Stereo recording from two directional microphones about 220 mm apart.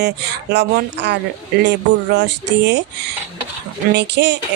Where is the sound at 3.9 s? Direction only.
50° right (ahead or behind).